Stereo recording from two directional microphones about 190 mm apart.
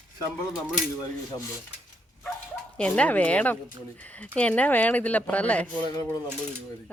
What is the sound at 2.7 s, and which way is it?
Speech, 5° left (ahead or behind).